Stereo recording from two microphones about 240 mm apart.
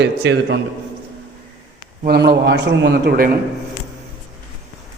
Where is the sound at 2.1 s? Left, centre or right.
Right.